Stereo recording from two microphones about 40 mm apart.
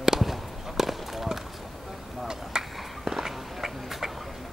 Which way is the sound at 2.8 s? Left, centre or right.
Centre.